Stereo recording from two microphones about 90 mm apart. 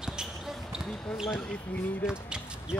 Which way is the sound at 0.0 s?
5° right (ahead or behind).